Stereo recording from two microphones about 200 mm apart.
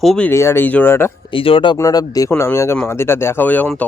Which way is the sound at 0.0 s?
5° left (ahead or behind).